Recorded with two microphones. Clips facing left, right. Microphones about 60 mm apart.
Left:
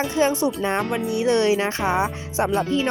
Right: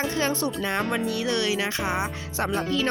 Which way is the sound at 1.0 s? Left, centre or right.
Left.